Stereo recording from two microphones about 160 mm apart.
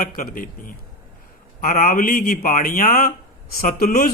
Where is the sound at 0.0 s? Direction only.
65° left (ahead or behind).